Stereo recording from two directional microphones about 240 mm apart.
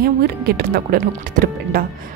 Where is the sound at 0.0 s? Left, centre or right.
Right.